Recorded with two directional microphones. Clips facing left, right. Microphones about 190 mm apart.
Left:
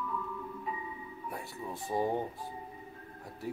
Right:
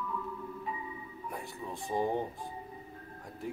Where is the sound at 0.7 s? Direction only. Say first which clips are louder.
Left 1 dB; centre (ahead or behind).